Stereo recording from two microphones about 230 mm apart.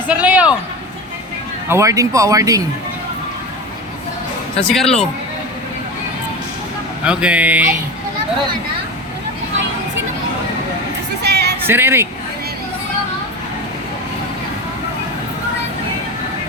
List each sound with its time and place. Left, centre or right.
0.1 s a sound: centre
1.6 s speech: centre
4.6 s speech: centre
7.0 s speech: centre
11.2 s music: right
11.6 s speech: centre